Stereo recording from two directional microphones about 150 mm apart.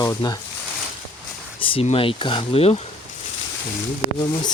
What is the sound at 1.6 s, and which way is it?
Speech, 40° left (ahead or behind).